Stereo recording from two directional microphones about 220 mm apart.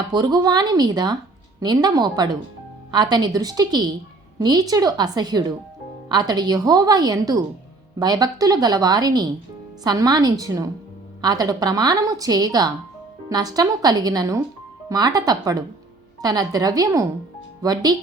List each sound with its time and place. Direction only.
0.1 s a woman's voice: 20° right (ahead or behind)